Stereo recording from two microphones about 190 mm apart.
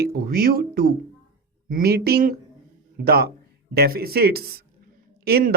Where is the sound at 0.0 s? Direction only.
55° right (ahead or behind).